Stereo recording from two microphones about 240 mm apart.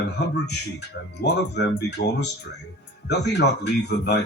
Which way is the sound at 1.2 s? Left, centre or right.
Left.